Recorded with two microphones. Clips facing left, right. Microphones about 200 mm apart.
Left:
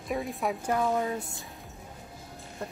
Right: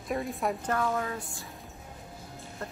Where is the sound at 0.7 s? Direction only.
15° left (ahead or behind).